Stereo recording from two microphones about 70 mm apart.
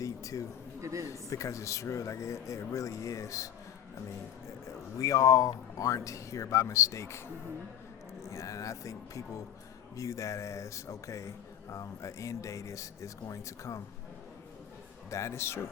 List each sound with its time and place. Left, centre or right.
0.0 s a sound: left
0.8 s a man's voice: right
1.0 s speech: left
8.2 s speech: left
15.1 s speech: left